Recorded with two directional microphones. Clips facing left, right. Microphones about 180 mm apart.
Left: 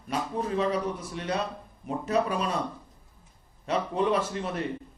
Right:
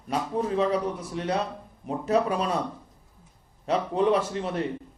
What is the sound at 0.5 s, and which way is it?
A man's voice, 30° right (ahead or behind).